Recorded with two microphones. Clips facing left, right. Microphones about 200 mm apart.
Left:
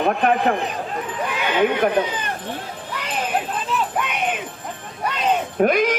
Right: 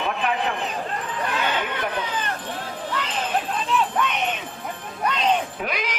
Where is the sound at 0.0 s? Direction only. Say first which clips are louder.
Left 7 dB; 50° left (ahead or behind).